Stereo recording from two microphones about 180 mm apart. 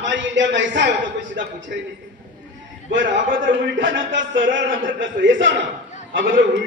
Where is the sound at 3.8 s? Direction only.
90° right.